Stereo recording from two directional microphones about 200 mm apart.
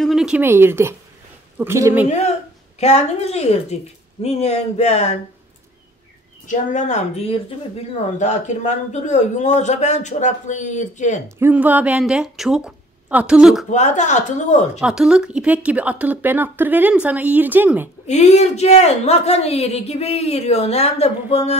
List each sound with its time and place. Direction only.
0.0 s speech: centre (ahead or behind)
2.0 s speech: 35° left (ahead or behind)
6.4 s speech: 40° left (ahead or behind)
11.2 s speech: 10° right (ahead or behind)
13.7 s speech: 35° left (ahead or behind)
14.8 s speech: 5° right (ahead or behind)
18.0 s speech: 35° left (ahead or behind)